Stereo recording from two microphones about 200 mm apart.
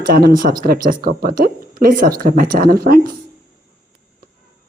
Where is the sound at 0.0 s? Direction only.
50° right (ahead or behind).